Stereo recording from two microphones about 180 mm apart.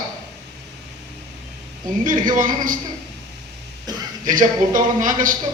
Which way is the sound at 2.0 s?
45° right (ahead or behind).